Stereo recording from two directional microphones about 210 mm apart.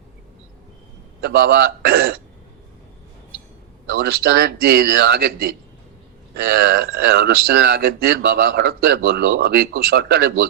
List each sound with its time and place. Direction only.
1.2 s speech: 50° right (ahead or behind)
3.8 s speech: 45° right (ahead or behind)